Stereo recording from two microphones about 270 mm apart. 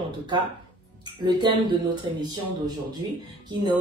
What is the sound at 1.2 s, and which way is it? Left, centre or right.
Speech, centre.